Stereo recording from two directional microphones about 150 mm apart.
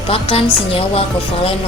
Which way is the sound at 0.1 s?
40° left (ahead or behind).